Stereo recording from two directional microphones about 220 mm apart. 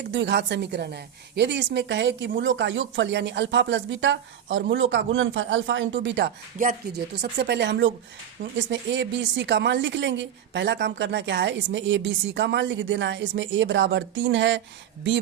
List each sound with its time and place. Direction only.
0.1 s a woman's voice: 50° right (ahead or behind)